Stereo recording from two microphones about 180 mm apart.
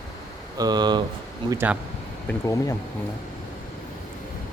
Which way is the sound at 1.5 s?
10° right (ahead or behind).